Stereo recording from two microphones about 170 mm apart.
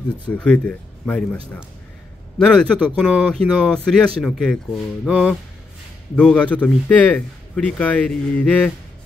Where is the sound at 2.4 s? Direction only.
5° left (ahead or behind).